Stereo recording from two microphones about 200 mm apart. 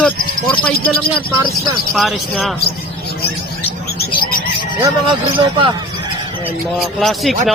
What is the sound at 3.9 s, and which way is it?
Bird, 45° left (ahead or behind).